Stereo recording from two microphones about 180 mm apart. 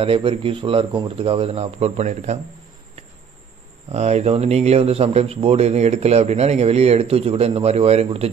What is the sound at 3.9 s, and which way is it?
Speech, 35° right (ahead or behind).